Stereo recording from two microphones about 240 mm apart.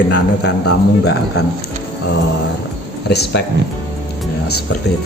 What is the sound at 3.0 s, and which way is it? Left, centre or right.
Speech, left.